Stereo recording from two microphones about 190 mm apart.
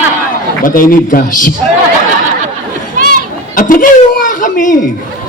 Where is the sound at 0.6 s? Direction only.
45° left (ahead or behind).